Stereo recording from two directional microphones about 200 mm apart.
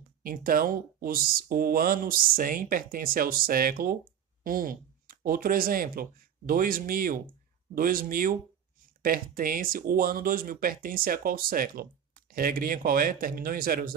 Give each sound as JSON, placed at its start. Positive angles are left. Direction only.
{"t": 0.2, "sound": "speech", "side_deg": -45}